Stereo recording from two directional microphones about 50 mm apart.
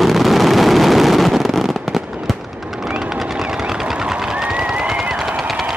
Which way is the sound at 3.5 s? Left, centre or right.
Centre.